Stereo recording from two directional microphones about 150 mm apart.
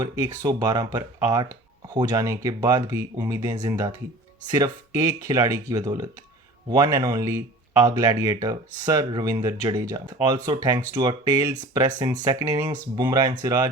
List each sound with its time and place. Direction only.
0.0 s speech: 25° right (ahead or behind)